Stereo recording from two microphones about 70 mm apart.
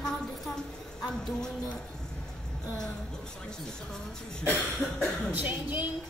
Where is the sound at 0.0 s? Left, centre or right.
Centre.